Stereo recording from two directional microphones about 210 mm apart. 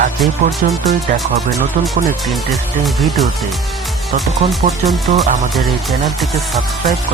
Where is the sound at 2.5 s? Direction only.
Centre (ahead or behind).